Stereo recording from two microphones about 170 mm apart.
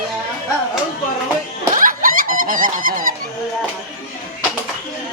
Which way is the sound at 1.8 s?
55° right (ahead or behind).